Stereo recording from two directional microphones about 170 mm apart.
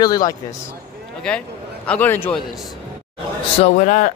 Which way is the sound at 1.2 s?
5° left (ahead or behind).